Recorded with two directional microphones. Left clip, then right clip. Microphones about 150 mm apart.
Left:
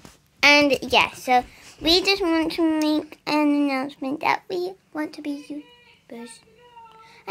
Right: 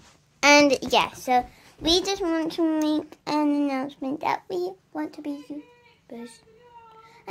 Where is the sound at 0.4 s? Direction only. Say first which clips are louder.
Left 1 dB; 10° left (ahead or behind).